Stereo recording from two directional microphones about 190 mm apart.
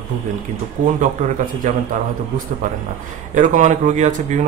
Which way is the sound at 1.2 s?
40° right (ahead or behind).